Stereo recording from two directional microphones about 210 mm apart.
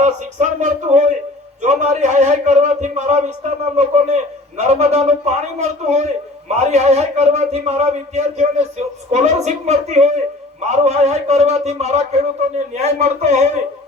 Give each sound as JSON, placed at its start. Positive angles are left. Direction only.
{"t": 0.0, "sound": "a man's voice", "side_deg": -35}